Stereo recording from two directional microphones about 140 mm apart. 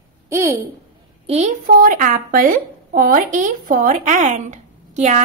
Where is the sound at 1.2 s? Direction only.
45° right (ahead or behind).